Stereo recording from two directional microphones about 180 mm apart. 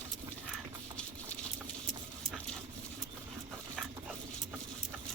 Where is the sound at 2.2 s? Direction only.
5° left (ahead or behind).